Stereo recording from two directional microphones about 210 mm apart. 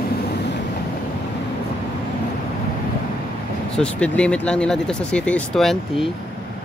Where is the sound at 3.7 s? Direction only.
5° left (ahead or behind).